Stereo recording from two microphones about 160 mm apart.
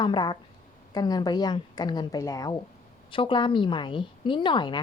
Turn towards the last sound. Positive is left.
turn(degrees=30)  # may be behind; listen again after turning